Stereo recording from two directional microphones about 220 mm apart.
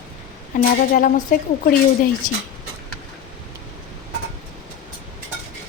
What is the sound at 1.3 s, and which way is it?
A woman's voice, 40° left (ahead or behind).